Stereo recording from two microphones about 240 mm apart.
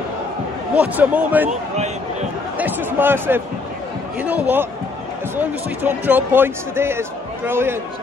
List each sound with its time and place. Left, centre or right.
0.7 s speech: centre
2.5 s a sound: centre
4.2 s speech: centre